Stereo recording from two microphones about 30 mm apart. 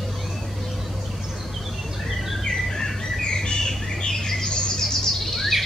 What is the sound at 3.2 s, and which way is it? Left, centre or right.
Bird, left.